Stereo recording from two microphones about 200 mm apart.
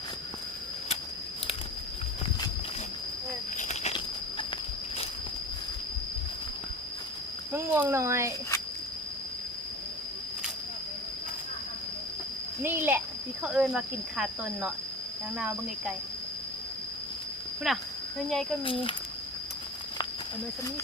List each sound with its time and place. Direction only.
3.6 s a sound: 35° left (ahead or behind)
7.5 s speech: 10° right (ahead or behind)
12.6 s speech: 10° right (ahead or behind)
17.7 s speech: centre (ahead or behind)
18.6 s speech: 25° left (ahead or behind)